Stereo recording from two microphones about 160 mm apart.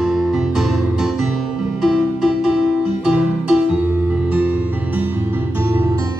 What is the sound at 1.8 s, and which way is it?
Music, centre (ahead or behind).